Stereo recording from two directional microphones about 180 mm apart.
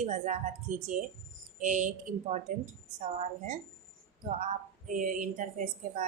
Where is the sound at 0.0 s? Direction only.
40° right (ahead or behind).